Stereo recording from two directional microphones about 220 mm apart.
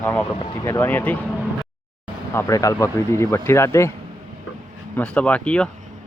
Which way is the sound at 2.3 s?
15° left (ahead or behind).